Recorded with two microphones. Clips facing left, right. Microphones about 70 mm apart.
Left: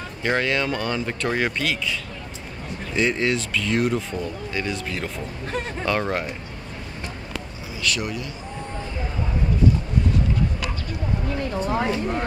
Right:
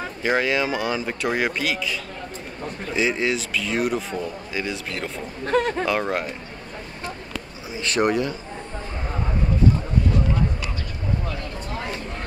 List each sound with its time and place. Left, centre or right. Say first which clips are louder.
0.2 s speech: right 1 dB; centre
5.5 s speech: right 9 dB; right
5.9 s speech: even; centre
7.8 s speech: right 5 dB; right
11.6 s a sound: left 9 dB; left